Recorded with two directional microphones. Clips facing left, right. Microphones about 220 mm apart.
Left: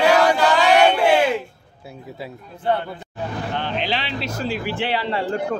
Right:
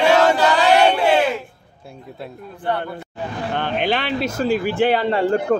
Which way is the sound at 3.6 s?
55° right (ahead or behind).